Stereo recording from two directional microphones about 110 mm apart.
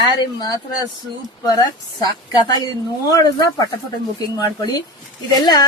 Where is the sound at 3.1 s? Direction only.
35° left (ahead or behind).